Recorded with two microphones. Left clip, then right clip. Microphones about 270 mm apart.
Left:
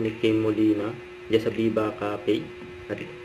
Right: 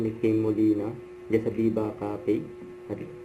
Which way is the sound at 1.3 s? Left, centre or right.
Left.